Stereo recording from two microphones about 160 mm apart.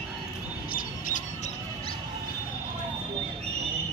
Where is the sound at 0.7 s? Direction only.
60° left (ahead or behind).